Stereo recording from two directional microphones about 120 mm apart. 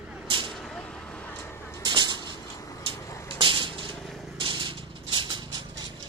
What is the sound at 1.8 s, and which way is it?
Vehicle, 40° right (ahead or behind).